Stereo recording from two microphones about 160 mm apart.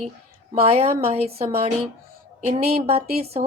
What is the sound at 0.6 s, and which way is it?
A woman's voice, 40° right (ahead or behind).